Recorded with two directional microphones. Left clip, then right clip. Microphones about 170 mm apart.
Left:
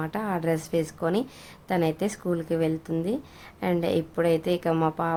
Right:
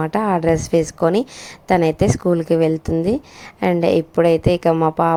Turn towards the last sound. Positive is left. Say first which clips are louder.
# right 9 dB
turn(degrees=-30)  # may be behind; listen again after turning